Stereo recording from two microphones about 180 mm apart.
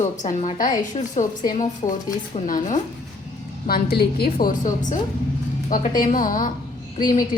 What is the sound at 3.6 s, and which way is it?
A woman's voice, 60° left (ahead or behind).